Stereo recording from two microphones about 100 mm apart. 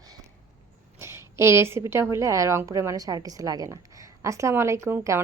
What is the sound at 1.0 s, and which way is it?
A woman's voice, 25° right (ahead or behind).